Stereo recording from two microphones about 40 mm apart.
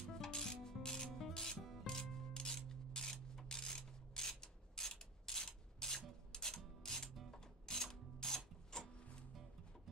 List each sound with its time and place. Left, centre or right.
0.1 s rub: centre
1.3 s filing: centre
1.9 s rub: centre
6.3 s music: centre